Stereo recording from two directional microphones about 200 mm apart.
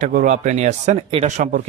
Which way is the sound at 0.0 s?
40° right (ahead or behind).